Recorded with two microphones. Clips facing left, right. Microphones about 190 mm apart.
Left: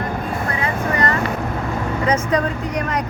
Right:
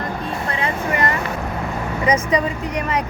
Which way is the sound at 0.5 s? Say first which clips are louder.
Even; 20° right (ahead or behind).